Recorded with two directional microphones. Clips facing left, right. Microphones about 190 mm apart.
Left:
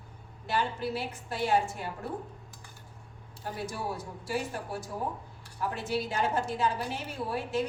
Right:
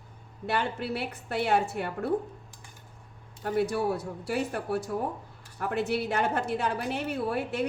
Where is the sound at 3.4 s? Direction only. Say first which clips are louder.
Right 9 dB; 65° right (ahead or behind).